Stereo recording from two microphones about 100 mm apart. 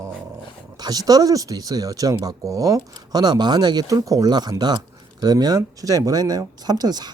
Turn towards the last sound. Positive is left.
turn(degrees=-45)  # may be behind; listen again after turning